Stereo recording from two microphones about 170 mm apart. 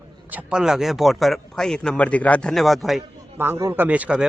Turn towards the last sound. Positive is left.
turn(degrees=-5)  # may be behind; listen again after turning